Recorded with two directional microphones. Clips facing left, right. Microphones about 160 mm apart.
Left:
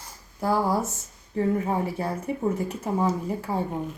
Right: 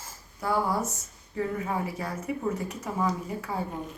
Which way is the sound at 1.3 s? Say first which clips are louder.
Left 5 dB; 30° left (ahead or behind).